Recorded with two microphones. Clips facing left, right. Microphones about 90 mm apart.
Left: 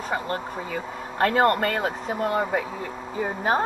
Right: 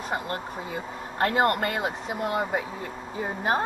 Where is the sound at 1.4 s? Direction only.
35° left (ahead or behind).